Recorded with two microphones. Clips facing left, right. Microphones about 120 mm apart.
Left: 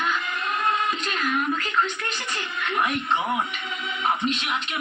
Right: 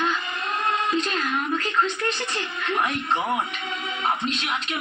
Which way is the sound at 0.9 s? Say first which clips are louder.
Right 1 dB; 30° right (ahead or behind).